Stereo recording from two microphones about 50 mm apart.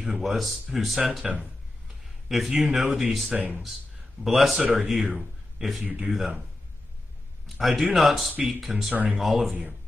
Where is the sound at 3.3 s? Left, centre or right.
Right.